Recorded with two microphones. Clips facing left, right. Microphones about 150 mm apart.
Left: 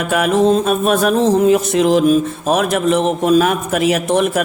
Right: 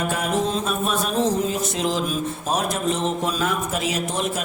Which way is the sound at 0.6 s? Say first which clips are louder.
Left 9 dB; 70° left (ahead or behind).